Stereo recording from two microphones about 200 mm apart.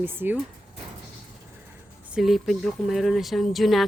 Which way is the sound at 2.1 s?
Centre (ahead or behind).